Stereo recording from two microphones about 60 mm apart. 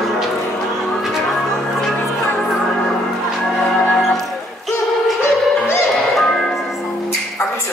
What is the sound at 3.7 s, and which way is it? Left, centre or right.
Music, centre.